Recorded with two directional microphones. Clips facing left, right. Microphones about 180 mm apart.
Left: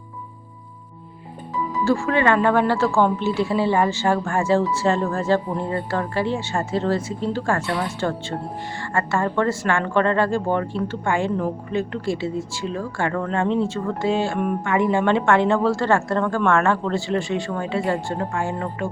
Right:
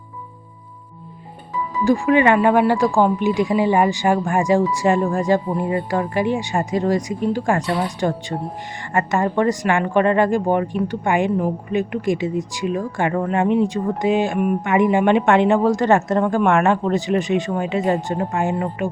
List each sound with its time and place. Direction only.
1.8 s a woman's voice: 15° right (ahead or behind)